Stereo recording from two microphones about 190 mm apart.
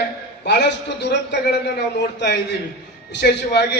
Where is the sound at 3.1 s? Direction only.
60° left (ahead or behind).